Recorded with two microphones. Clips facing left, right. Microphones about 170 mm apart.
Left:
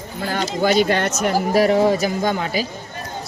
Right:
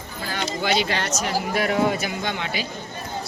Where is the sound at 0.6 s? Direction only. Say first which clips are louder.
Left 7 dB; 45° left (ahead or behind).